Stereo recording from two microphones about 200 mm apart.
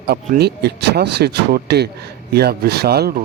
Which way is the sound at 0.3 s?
55° right (ahead or behind).